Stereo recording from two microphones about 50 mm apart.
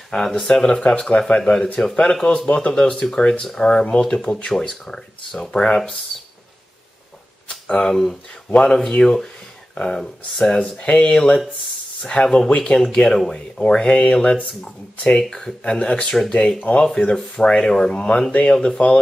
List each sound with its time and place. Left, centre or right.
0.1 s speech: centre
7.4 s speech: centre
10.8 s speech: left